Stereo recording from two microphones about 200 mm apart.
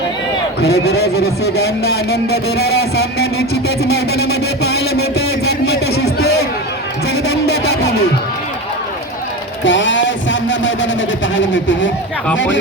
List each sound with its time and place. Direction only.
0.6 s a man's voice: 55° left (ahead or behind)
7.3 s a sound: 55° left (ahead or behind)
9.6 s music: 65° left (ahead or behind)
11.3 s speech: 65° left (ahead or behind)